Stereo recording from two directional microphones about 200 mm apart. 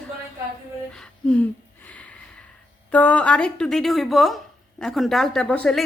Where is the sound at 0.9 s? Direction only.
5° left (ahead or behind).